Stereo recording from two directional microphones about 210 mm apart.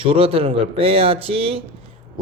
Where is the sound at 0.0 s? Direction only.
25° right (ahead or behind).